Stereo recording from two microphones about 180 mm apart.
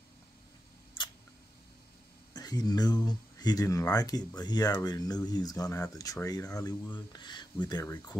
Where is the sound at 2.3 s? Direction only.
20° left (ahead or behind).